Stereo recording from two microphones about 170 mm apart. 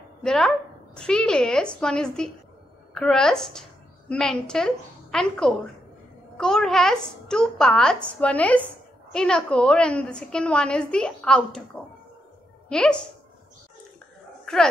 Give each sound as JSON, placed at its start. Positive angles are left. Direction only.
{"t": 0.2, "sound": "a woman's voice", "side_deg": 5}
{"t": 14.4, "sound": "dog", "side_deg": 5}